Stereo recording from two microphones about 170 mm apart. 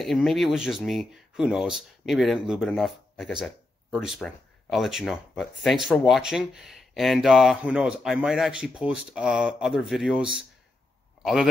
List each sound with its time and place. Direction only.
0.0 s speech: centre (ahead or behind)